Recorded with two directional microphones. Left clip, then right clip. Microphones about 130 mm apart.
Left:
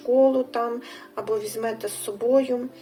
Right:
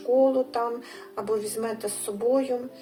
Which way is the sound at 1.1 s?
35° left (ahead or behind).